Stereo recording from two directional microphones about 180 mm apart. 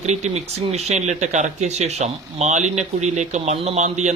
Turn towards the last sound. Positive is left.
turn(degrees=-40)  # may be behind; listen again after turning